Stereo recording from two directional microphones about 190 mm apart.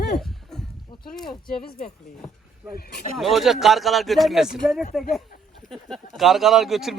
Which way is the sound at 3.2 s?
Centre (ahead or behind).